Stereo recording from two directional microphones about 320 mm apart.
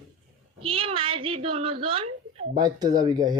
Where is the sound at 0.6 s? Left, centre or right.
Centre.